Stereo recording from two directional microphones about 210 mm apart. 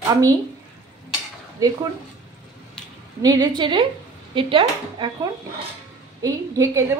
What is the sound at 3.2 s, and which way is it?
Cutlery, 20° right (ahead or behind).